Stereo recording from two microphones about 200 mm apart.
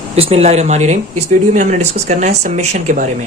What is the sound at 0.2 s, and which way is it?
Speech, 30° right (ahead or behind).